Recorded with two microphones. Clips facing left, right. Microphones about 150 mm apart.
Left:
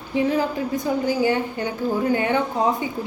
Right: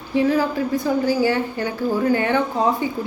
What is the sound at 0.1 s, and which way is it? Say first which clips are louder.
A woman's voice: right 3 dB; 20° left (ahead or behind).